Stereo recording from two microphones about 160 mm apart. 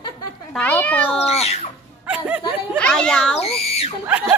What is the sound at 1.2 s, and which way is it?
Speech, 40° left (ahead or behind).